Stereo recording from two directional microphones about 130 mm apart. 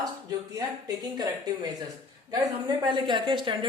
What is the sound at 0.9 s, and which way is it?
Speech, 30° right (ahead or behind).